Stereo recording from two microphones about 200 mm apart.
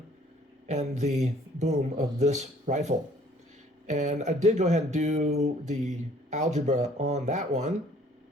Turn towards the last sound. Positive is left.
turn(degrees=-35)  # may be behind; listen again after turning